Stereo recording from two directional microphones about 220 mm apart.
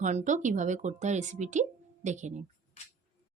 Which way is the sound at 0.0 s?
35° right (ahead or behind).